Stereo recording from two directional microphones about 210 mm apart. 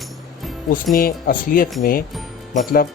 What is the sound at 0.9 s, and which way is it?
Speech, 45° left (ahead or behind).